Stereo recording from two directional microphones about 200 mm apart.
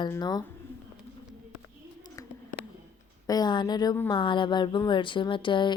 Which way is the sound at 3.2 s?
20° left (ahead or behind).